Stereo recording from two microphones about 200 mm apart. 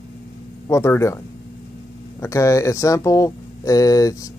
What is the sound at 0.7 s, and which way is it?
Speech, 15° left (ahead or behind).